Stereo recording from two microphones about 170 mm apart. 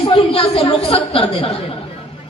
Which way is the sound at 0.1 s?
35° left (ahead or behind).